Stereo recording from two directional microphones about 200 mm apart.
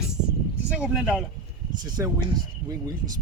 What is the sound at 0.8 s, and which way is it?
Speech, 5° right (ahead or behind).